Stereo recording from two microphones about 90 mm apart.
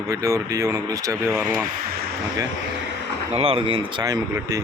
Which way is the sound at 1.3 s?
25° right (ahead or behind).